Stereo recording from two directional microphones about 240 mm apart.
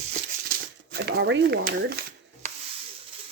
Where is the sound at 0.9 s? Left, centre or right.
Right.